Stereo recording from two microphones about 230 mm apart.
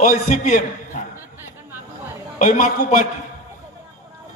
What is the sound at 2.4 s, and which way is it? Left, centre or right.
Speech, left.